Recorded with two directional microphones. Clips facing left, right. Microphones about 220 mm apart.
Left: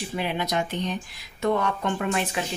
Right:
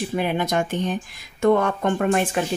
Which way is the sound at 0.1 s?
50° right (ahead or behind).